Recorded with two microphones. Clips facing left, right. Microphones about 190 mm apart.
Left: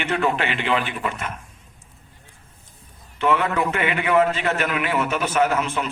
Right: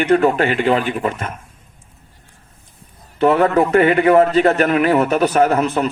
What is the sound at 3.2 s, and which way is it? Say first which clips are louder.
A man's voice: right 7 dB; 40° right (ahead or behind).